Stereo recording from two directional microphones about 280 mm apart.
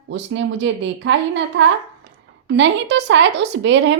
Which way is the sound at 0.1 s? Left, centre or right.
Right.